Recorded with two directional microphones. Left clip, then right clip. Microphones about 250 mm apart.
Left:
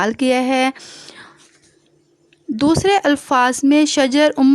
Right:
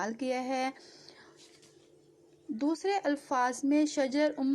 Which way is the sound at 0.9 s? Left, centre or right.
Left.